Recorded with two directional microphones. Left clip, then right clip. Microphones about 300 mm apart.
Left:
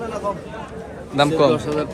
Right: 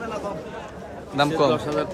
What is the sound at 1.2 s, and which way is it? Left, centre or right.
Speech, centre.